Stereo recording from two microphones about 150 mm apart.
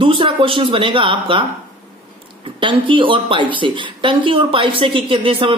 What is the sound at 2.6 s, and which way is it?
Speech, 35° right (ahead or behind).